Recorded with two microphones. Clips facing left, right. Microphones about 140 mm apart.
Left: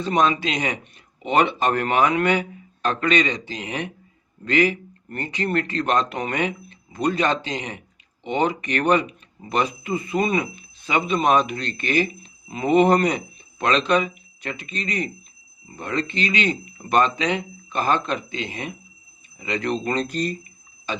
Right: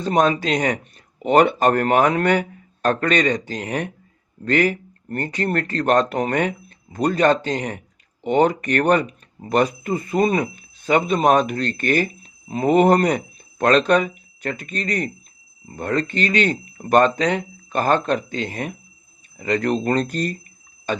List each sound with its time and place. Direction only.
0.0 s speech: 45° right (ahead or behind)